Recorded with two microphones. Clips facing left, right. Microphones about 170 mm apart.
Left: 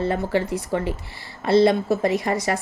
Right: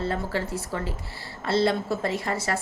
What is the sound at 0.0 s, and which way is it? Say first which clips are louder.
Speech: left 6 dB; 15° left (ahead or behind).